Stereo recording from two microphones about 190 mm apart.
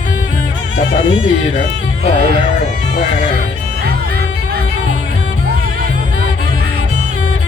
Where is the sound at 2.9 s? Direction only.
40° left (ahead or behind).